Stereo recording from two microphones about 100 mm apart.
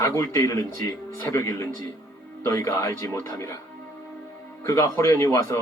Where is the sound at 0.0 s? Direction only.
30° left (ahead or behind).